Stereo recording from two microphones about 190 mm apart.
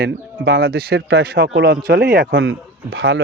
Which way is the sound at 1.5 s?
65° right (ahead or behind).